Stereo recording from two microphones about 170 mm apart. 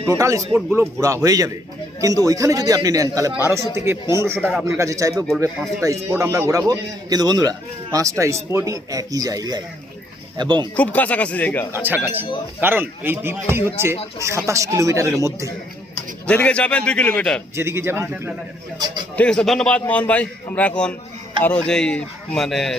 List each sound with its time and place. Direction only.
0.1 s a man's voice: 20° right (ahead or behind)
10.8 s a man's voice: 10° left (ahead or behind)
11.7 s speech: 10° right (ahead or behind)
16.2 s a man's voice: 5° left (ahead or behind)
17.5 s speech: 15° right (ahead or behind)
19.1 s a man's voice: 5° left (ahead or behind)